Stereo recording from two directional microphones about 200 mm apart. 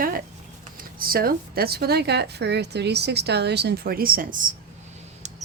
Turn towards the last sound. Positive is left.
turn(degrees=-40)  # may be behind; listen again after turning